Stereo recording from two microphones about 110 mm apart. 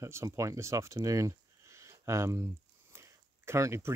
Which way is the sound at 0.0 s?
25° right (ahead or behind).